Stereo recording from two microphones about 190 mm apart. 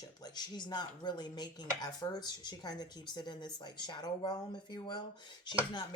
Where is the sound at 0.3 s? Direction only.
20° left (ahead or behind).